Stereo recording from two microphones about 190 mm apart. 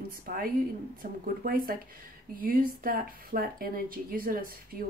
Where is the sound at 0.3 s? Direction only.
45° right (ahead or behind).